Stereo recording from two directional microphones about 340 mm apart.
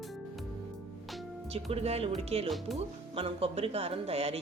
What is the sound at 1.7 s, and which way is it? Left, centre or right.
Speech, centre.